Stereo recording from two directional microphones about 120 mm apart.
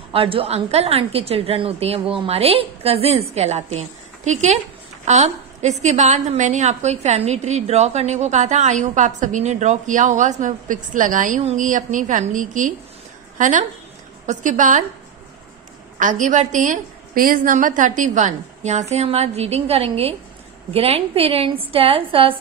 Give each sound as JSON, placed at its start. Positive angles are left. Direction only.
{"t": 0.1, "sound": "a woman's voice", "side_deg": -50}
{"t": 16.0, "sound": "a woman's voice", "side_deg": -90}